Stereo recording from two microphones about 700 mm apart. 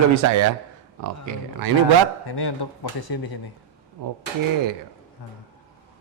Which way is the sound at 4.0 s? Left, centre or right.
Right.